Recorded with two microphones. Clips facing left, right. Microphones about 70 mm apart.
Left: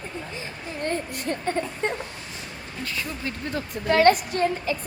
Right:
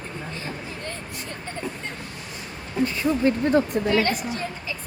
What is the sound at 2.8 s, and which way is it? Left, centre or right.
Speech, right.